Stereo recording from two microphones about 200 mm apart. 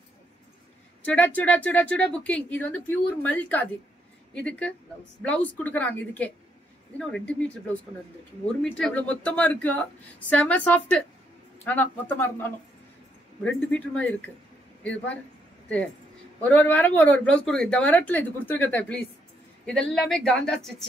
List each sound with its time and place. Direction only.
1.0 s speech: 5° left (ahead or behind)
8.6 s speech: 5° left (ahead or behind)
16.4 s speech: 5° left (ahead or behind)